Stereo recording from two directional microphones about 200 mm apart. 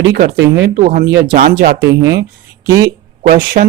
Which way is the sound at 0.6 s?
45° right (ahead or behind).